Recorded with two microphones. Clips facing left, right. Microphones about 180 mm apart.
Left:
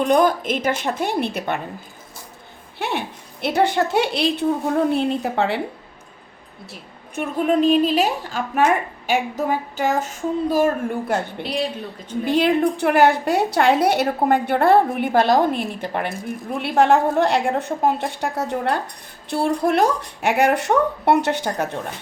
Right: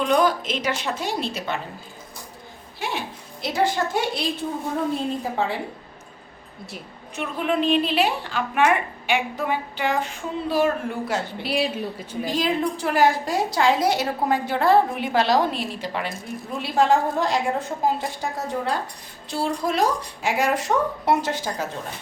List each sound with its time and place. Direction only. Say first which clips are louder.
0.0 s a woman's voice: left 3 dB; 50° left (ahead or behind)
2.7 s a woman's voice: left 4 dB; 60° left (ahead or behind)
7.2 s a woman's voice: left 5 dB; 45° left (ahead or behind)
11.1 s a woman's voice: left 4 dB; 55° left (ahead or behind)
11.4 s a woman's voice: right 3 dB; 5° right (ahead or behind)
12.2 s a woman's voice: left 6 dB; 60° left (ahead or behind)